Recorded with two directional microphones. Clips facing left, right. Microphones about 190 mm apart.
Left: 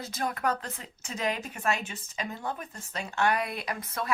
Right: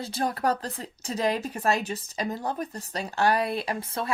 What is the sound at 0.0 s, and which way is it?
Speech, 30° right (ahead or behind).